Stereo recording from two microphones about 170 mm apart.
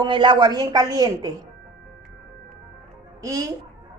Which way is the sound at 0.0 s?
30° right (ahead or behind).